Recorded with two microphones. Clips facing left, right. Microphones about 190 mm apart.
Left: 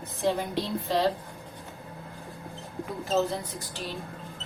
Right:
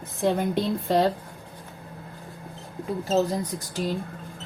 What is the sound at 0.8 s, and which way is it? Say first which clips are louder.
Speech: right 4 dB; 50° right (ahead or behind).